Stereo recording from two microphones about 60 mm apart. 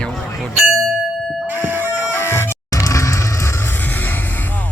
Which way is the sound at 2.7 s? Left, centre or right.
Left.